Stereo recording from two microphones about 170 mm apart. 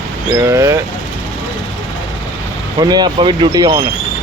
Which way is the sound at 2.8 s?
25° right (ahead or behind).